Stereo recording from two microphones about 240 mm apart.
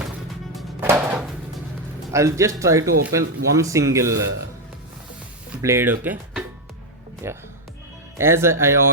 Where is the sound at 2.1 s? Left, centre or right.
Centre.